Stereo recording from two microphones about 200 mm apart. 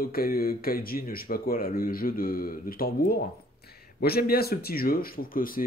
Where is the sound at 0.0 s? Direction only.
45° left (ahead or behind).